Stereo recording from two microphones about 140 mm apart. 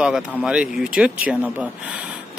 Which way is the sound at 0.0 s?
5° right (ahead or behind).